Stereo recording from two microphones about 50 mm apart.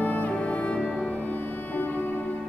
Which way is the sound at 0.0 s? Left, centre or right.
Left.